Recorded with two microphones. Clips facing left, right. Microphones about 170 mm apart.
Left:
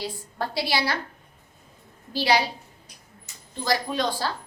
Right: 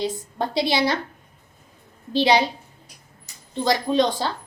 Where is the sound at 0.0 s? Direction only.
20° right (ahead or behind).